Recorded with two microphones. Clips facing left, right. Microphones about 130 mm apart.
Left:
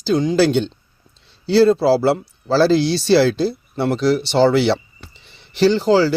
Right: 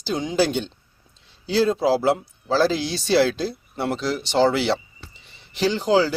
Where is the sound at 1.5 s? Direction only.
75° left (ahead or behind).